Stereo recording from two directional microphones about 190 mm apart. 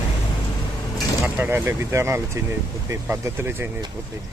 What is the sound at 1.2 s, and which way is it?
Speech, 10° right (ahead or behind).